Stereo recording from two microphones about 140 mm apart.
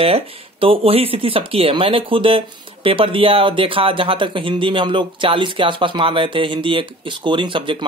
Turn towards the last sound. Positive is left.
turn(degrees=-35)  # may be behind; listen again after turning